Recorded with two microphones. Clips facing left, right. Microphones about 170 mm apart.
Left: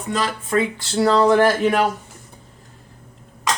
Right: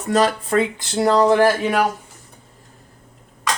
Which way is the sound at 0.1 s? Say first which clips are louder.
Right 4 dB; 40° right (ahead or behind).